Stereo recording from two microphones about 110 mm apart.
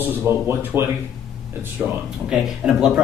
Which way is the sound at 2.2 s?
10° right (ahead or behind).